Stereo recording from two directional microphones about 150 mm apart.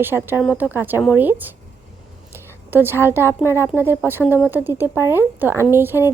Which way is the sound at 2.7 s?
15° right (ahead or behind).